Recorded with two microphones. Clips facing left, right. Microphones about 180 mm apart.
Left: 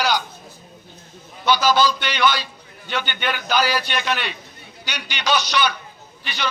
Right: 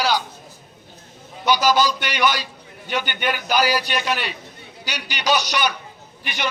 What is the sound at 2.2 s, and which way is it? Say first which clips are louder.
Speech: left 1 dB; 40° right (ahead or behind).